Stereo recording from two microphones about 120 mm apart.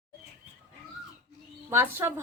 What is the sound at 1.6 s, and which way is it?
Speech, 20° right (ahead or behind).